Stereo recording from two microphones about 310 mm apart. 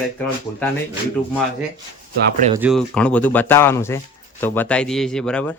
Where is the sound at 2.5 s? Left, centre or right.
Centre.